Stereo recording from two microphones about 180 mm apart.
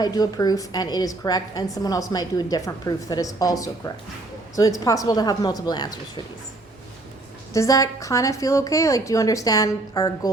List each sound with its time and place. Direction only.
0.0 s a woman's voice: 20° left (ahead or behind)
7.5 s a woman's voice: 20° left (ahead or behind)